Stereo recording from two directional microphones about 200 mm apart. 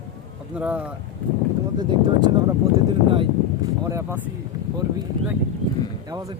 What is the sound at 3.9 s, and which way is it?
Speech, 15° right (ahead or behind).